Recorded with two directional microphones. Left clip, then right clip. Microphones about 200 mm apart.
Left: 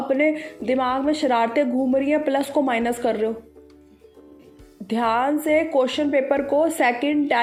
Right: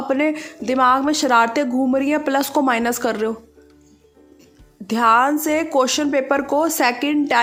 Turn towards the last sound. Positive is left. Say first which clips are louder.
# right 2 dB
turn(degrees=-30)  # may be behind; listen again after turning